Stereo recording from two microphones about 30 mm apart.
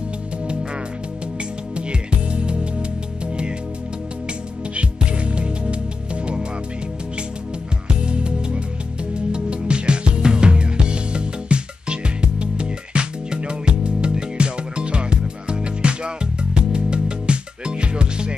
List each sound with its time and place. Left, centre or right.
1.8 s music: right
4.7 s music: right
8.0 s music: right